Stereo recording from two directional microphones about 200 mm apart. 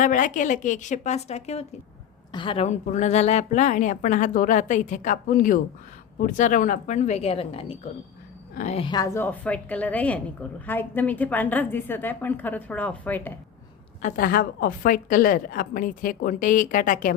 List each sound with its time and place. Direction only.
0.0 s a woman's voice: 40° left (ahead or behind); by 13.4 s 10° left (ahead or behind)
14.0 s a woman's voice: 45° left (ahead or behind)